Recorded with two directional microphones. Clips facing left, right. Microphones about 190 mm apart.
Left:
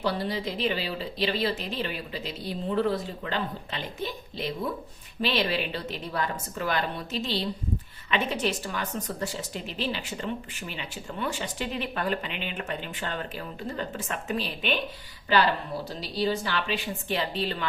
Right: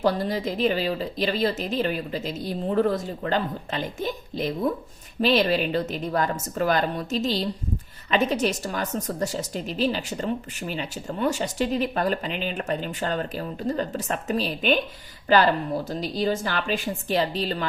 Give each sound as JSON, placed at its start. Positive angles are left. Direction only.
{"t": 0.0, "sound": "speech", "side_deg": -45}